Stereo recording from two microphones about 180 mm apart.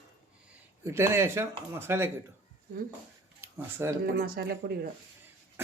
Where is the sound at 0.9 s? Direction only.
15° right (ahead or behind).